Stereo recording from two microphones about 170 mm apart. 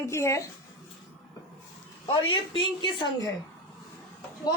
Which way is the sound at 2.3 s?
30° left (ahead or behind).